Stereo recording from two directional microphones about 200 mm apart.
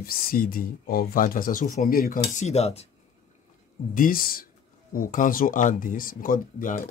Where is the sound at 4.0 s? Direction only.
45° left (ahead or behind).